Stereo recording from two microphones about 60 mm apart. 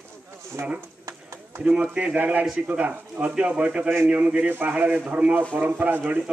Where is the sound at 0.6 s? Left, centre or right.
Right.